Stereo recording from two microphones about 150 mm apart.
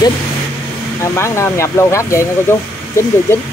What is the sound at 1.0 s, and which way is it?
Speech, 20° left (ahead or behind).